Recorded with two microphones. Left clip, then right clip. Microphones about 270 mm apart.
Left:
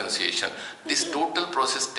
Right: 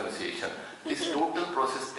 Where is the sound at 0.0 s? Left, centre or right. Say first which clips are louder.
Left 7 dB; centre.